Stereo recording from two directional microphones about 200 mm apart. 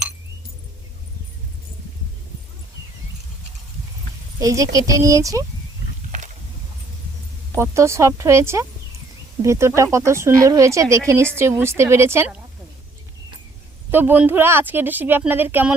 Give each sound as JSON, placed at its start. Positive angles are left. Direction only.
{"t": 4.4, "sound": "a woman's voice", "side_deg": -15}
{"t": 7.5, "sound": "a woman's voice", "side_deg": -15}
{"t": 13.9, "sound": "a woman's voice", "side_deg": -10}